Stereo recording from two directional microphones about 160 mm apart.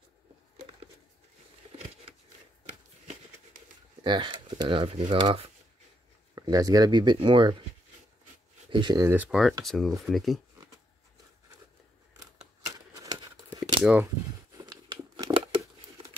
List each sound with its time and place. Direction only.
4.0 s speech: 30° right (ahead or behind)
6.3 s speech: 20° right (ahead or behind)
8.6 s speech: 30° right (ahead or behind)
9.0 s speech: 10° right (ahead or behind)
12.6 s a sound: 20° right (ahead or behind)
14.5 s tearing: 25° right (ahead or behind)